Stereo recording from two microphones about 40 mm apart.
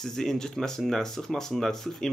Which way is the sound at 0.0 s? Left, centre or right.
Centre.